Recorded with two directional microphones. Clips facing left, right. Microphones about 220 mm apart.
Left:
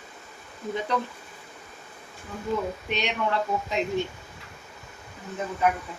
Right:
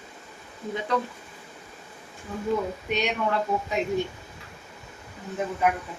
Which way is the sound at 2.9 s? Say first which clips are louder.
Right 2 dB; 5° right (ahead or behind).